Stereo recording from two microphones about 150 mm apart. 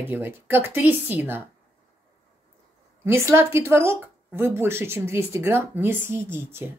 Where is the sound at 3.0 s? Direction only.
15° right (ahead or behind).